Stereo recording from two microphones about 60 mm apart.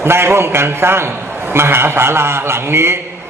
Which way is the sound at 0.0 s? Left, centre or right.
Right.